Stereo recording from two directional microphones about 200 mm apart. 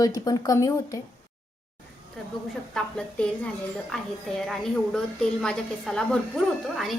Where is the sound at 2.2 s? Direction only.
Centre (ahead or behind).